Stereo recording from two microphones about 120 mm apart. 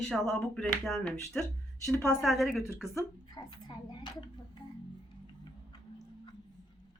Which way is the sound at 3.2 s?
35° left (ahead or behind).